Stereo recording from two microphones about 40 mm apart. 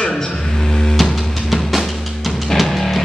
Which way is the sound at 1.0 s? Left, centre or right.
Centre.